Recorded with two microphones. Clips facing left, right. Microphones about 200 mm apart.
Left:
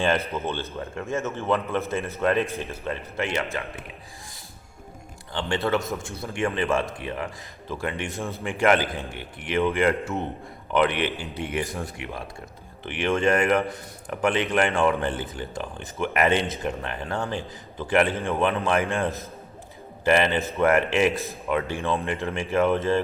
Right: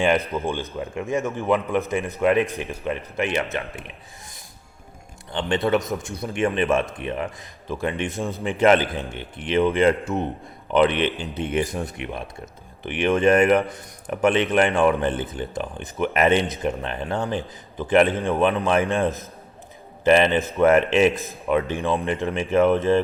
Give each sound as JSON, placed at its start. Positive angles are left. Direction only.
{"t": 0.0, "sound": "a man's voice", "side_deg": -15}
{"t": 5.3, "sound": "a man's voice", "side_deg": -20}